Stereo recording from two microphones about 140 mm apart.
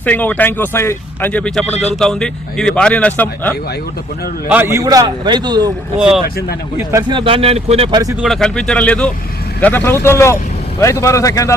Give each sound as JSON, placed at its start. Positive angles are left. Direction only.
{"t": 0.0, "sound": "speech", "side_deg": 10}
{"t": 1.6, "sound": "speech", "side_deg": 50}
{"t": 2.0, "sound": "speech", "side_deg": 5}
{"t": 4.5, "sound": "a man's voice", "side_deg": -20}
{"t": 6.0, "sound": "speech", "side_deg": -5}
{"t": 6.2, "sound": "speech", "side_deg": 90}
{"t": 7.1, "sound": "speech", "side_deg": -40}
{"t": 8.2, "sound": "speech", "side_deg": 5}